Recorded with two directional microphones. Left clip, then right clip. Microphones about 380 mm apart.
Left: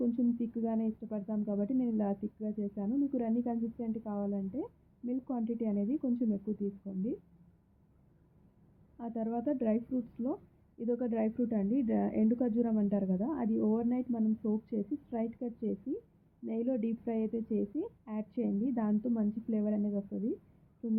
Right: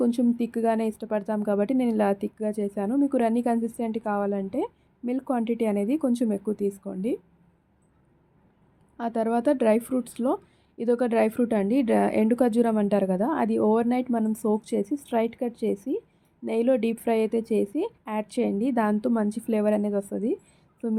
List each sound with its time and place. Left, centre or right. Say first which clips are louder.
0.1 s a woman's voice: right 8 dB; right
9.0 s a woman's voice: right 12 dB; right